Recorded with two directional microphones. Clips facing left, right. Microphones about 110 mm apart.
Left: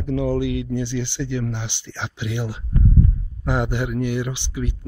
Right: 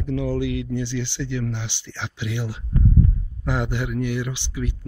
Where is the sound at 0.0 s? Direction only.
20° left (ahead or behind).